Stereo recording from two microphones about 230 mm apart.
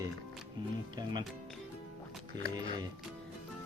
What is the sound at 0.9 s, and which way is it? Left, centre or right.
Music, centre.